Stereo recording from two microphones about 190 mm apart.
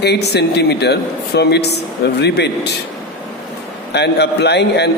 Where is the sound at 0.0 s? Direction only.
60° left (ahead or behind).